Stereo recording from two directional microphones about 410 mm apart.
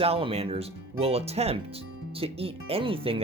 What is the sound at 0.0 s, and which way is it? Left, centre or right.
Speech, centre.